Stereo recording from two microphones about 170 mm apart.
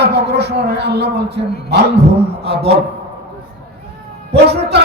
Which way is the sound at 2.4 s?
70° right (ahead or behind).